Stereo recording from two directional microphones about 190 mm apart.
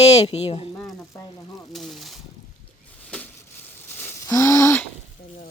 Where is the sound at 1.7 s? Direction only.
Centre (ahead or behind).